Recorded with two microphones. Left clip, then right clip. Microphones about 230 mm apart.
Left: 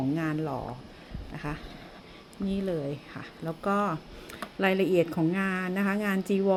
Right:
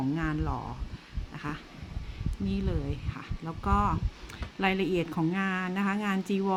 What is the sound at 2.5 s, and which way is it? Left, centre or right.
Speech, centre.